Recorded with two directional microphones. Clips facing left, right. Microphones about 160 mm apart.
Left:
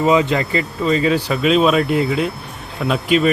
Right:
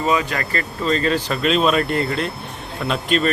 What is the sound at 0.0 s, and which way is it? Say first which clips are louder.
Speech: left 5 dB; 20° left (ahead or behind).